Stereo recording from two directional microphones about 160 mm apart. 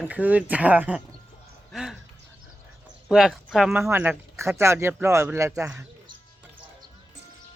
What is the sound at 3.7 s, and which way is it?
Speech, 15° right (ahead or behind).